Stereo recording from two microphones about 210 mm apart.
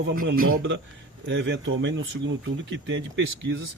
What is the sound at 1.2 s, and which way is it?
A man's voice, 55° right (ahead or behind).